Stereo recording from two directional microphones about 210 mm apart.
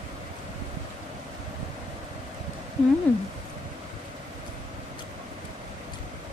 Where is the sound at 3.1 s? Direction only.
5° left (ahead or behind).